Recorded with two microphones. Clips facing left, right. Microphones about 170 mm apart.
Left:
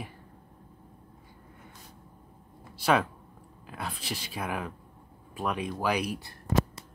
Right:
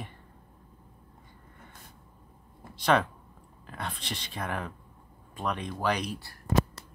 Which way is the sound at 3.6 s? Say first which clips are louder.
Left 1 dB; 5° left (ahead or behind).